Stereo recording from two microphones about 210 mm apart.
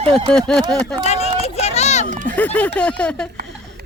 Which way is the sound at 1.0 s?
30° left (ahead or behind).